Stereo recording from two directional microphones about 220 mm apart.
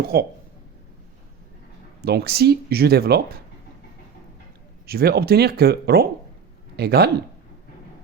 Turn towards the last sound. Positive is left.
turn(degrees=-45)  # may be behind; listen again after turning